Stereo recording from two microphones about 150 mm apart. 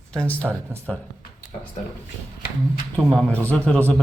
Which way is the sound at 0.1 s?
10° left (ahead or behind).